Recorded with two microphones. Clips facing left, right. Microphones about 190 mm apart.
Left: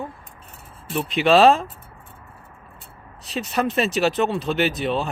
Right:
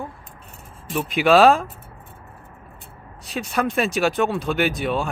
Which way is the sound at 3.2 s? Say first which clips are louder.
Even; centre (ahead or behind).